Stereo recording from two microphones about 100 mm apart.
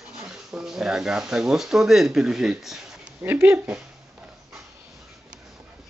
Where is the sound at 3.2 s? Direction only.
25° right (ahead or behind).